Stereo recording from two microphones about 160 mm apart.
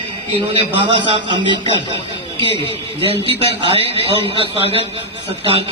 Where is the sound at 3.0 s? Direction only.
35° right (ahead or behind).